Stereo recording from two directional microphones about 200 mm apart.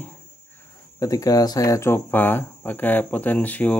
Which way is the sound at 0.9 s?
15° left (ahead or behind).